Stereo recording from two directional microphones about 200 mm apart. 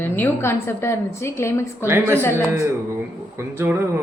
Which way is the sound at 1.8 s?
10° right (ahead or behind).